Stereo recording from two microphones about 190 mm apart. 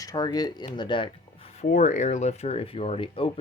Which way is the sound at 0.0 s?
20° left (ahead or behind).